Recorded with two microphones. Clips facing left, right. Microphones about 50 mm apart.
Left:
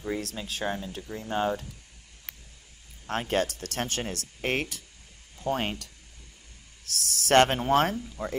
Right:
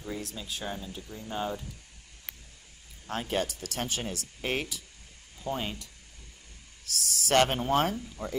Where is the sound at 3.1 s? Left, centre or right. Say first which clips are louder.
Left 4 dB; left.